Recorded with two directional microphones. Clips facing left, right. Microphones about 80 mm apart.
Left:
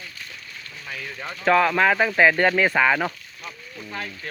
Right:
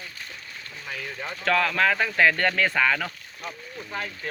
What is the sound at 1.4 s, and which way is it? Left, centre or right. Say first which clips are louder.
Speech: left 5 dB; centre.